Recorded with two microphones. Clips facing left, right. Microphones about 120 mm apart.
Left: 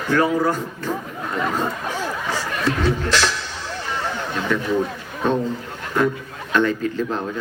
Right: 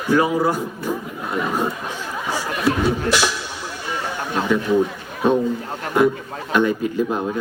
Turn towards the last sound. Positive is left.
turn(degrees=-10)  # may be behind; listen again after turning